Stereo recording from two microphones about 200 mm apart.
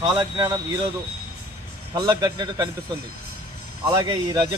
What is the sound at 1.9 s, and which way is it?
Speech, 20° right (ahead or behind).